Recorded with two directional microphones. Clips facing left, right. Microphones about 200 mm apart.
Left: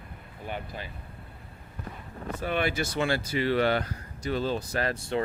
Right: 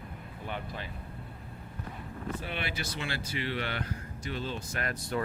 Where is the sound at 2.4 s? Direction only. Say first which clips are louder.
Left 9 dB; 45° left (ahead or behind).